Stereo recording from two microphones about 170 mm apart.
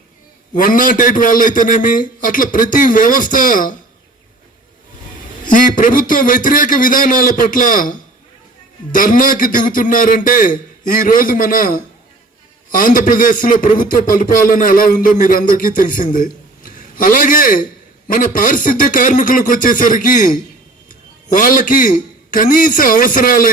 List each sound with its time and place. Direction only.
0.5 s a man's voice: 50° left (ahead or behind)
5.5 s a man's voice: 50° left (ahead or behind)